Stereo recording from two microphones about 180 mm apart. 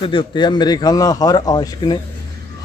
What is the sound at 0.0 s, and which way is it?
Speech, 30° left (ahead or behind).